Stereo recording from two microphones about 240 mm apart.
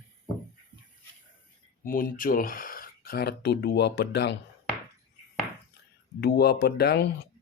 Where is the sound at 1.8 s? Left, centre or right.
Left.